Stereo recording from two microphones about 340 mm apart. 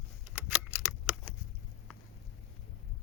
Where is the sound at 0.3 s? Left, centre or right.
Centre.